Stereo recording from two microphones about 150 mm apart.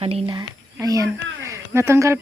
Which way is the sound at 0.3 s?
25° right (ahead or behind).